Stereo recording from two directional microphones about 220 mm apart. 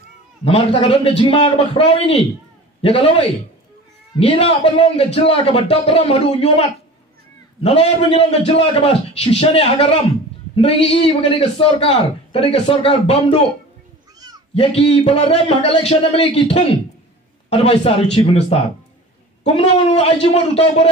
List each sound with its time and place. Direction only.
0.7 s a man's voice: 25° left (ahead or behind)
7.6 s a man's voice: 25° left (ahead or behind)
14.5 s a man's voice: 25° left (ahead or behind)